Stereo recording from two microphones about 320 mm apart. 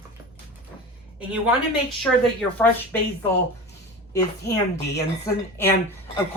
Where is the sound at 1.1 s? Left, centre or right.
Centre.